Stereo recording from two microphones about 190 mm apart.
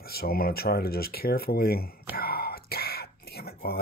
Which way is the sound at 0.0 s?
55° left (ahead or behind).